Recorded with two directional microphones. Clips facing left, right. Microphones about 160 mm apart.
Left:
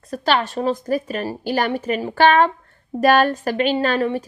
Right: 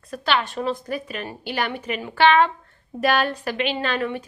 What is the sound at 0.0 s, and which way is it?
A woman's voice, 40° left (ahead or behind).